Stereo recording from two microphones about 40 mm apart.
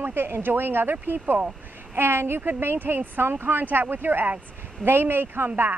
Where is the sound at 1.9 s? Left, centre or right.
Right.